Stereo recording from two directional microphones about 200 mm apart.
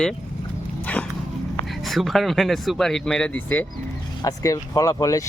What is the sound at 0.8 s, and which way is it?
Dog, 5° left (ahead or behind).